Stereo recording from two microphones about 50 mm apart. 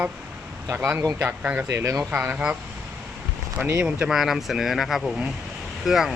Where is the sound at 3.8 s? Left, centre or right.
Centre.